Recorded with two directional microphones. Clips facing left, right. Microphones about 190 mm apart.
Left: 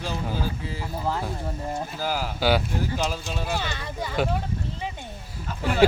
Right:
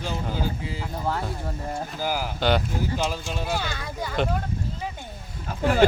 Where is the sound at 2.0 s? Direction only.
15° right (ahead or behind).